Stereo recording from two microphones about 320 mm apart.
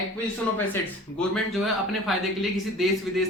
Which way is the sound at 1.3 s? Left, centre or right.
Centre.